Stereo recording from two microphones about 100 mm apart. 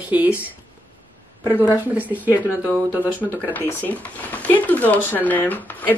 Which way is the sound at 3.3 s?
20° left (ahead or behind).